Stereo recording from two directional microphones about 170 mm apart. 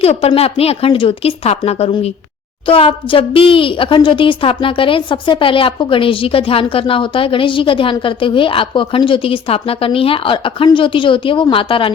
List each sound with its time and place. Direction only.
0.0 s a woman's voice: 35° left (ahead or behind)